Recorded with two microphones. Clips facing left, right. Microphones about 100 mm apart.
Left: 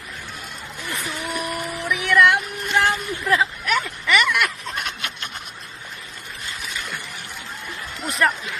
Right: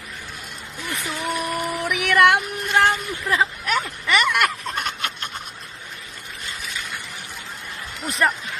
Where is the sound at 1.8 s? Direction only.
75° right (ahead or behind); by 2.4 s 60° right (ahead or behind).